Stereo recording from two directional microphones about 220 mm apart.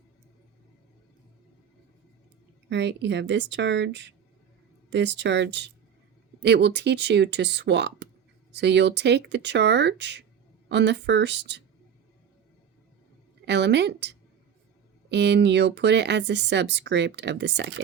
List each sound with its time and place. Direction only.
2.6 s speech: 50° right (ahead or behind)
13.4 s speech: 50° right (ahead or behind)